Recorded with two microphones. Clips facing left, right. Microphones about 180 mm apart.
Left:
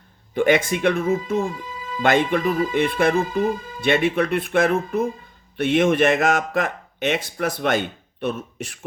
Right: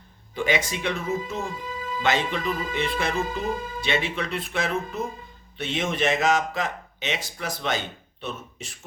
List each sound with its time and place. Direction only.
0.3 s speech: 55° left (ahead or behind)